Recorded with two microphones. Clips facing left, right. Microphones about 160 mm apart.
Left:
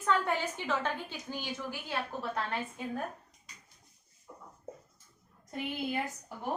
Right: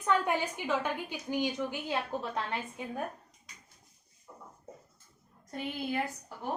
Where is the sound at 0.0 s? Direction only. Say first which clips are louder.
Right 1 dB; 10° right (ahead or behind).